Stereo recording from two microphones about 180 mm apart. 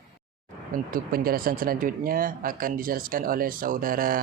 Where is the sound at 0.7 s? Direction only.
50° right (ahead or behind).